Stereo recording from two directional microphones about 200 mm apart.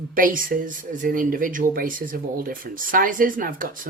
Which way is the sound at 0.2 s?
45° right (ahead or behind).